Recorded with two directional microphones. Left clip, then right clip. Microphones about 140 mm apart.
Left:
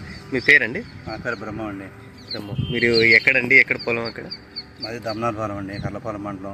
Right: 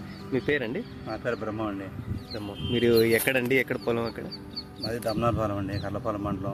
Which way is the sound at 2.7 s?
10° right (ahead or behind).